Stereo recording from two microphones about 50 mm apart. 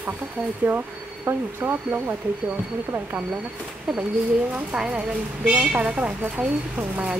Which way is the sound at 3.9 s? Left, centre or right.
Right.